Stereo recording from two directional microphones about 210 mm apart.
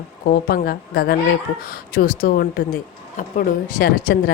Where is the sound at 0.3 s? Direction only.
45° left (ahead or behind).